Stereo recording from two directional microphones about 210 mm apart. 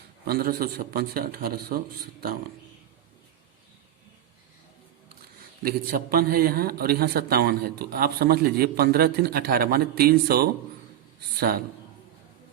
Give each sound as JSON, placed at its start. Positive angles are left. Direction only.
{"t": 0.3, "sound": "a man's voice", "side_deg": -45}
{"t": 5.6, "sound": "a man's voice", "side_deg": -45}